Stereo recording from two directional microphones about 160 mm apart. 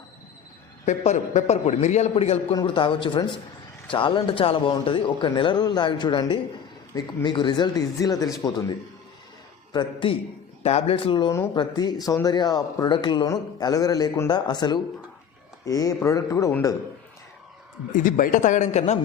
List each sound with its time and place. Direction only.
0.9 s a man's voice: 45° left (ahead or behind); by 8.6 s 25° left (ahead or behind)
9.7 s a man's voice: 30° left (ahead or behind)
11.3 s speech: 15° left (ahead or behind)
17.9 s a man's voice: 60° left (ahead or behind)